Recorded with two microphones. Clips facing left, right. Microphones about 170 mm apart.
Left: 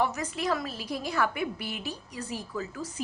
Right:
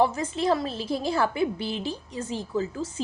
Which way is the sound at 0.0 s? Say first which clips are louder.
Right 5 dB; 25° right (ahead or behind).